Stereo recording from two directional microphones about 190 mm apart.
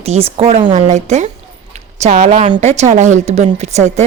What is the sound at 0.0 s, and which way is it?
A woman's voice, 35° right (ahead or behind).